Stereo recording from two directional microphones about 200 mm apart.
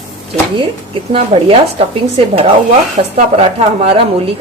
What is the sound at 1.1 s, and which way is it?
Speech, 30° right (ahead or behind).